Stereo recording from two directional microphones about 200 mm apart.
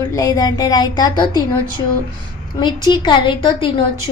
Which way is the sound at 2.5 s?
20° left (ahead or behind).